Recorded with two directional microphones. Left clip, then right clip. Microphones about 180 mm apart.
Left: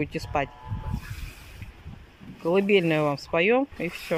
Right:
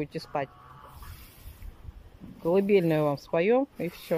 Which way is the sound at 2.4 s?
10° right (ahead or behind).